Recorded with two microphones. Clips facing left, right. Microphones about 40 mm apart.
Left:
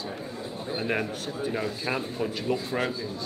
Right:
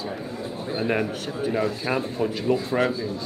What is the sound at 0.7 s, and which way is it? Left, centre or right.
Speech, centre.